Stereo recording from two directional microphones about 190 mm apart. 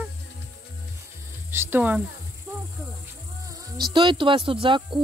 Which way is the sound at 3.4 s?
20° right (ahead or behind).